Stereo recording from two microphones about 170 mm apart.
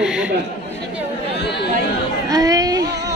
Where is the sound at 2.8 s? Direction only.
90° right.